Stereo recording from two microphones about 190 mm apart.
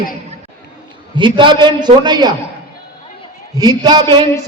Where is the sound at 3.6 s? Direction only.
20° right (ahead or behind).